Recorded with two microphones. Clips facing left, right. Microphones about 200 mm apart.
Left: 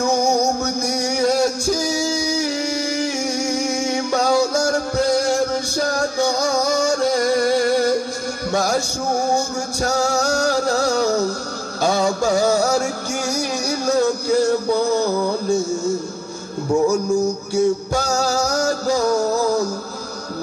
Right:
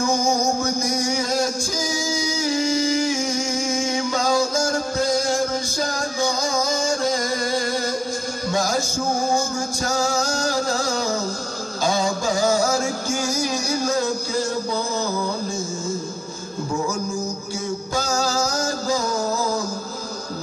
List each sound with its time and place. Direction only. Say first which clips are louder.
0.0 s music: left 3 dB; 65° left (ahead or behind)
17.6 s music: left 9 dB; 65° left (ahead or behind)